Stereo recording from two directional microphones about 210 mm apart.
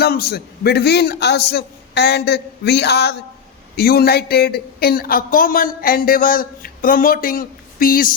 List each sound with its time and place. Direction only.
0.0 s speech: 50° left (ahead or behind)